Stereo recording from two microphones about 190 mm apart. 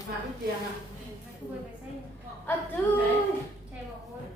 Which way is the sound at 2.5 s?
10° left (ahead or behind).